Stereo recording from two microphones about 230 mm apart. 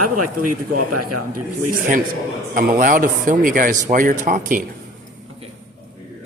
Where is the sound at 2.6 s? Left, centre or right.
Right.